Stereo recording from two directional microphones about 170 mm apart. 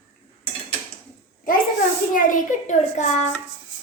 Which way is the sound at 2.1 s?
50° left (ahead or behind).